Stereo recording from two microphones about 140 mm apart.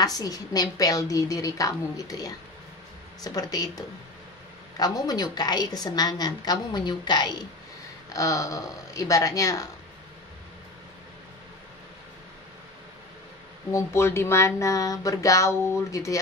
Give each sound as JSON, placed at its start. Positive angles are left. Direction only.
{"t": 0.0, "sound": "a woman's voice", "side_deg": 25}
{"t": 13.7, "sound": "a woman's voice", "side_deg": 20}